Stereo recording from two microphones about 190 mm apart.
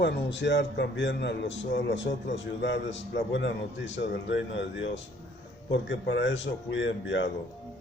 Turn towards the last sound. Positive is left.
turn(degrees=70)  # may be behind; listen again after turning